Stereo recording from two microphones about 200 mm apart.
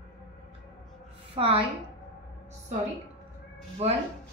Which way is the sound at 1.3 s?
25° right (ahead or behind).